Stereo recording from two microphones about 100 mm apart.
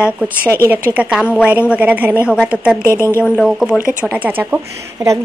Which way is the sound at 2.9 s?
25° left (ahead or behind).